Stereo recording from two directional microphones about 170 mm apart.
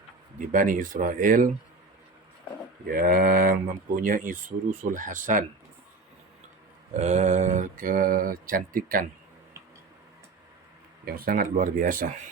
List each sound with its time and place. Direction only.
0.3 s speech: 50° right (ahead or behind)
2.8 s speech: 60° right (ahead or behind)
6.9 s speech: 40° right (ahead or behind)
11.0 s speech: 60° right (ahead or behind)